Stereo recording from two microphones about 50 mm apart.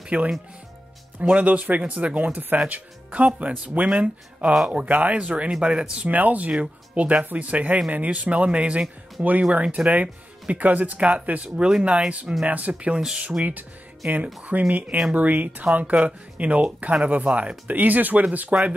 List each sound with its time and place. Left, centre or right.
0.1 s speech: right
6.0 s speech: right